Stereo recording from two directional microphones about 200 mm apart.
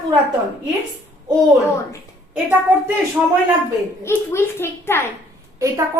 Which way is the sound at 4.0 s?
10° left (ahead or behind).